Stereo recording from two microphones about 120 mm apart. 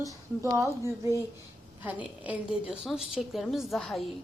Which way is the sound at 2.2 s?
10° right (ahead or behind).